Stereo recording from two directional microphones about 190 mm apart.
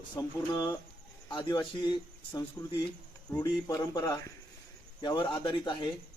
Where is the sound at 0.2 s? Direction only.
15° left (ahead or behind).